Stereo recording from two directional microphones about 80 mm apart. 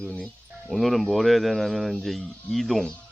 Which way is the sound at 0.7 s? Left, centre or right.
Centre.